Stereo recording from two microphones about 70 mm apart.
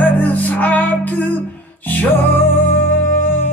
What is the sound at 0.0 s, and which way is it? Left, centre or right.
Music, left.